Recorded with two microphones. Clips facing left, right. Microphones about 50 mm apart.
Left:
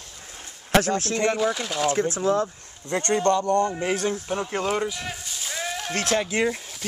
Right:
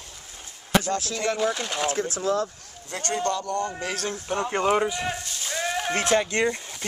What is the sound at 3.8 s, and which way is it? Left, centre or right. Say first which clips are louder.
Speech: left 5 dB; centre.